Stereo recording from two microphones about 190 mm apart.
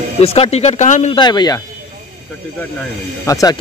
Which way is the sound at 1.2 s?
20° left (ahead or behind).